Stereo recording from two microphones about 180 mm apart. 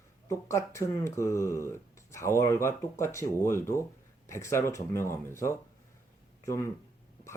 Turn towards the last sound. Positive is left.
turn(degrees=15)  # may be behind; listen again after turning